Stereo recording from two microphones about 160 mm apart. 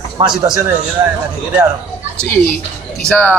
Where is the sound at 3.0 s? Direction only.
10° left (ahead or behind).